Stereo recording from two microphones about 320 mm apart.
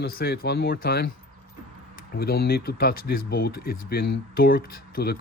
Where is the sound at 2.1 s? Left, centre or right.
Left.